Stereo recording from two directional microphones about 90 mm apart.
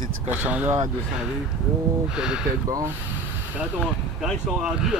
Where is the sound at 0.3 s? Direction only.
15° right (ahead or behind).